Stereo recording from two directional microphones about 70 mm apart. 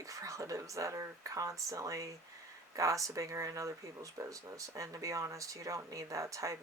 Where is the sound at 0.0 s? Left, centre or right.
Right.